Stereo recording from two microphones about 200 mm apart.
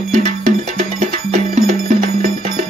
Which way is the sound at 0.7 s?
35° right (ahead or behind).